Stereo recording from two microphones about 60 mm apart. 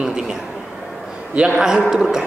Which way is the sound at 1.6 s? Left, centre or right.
Centre.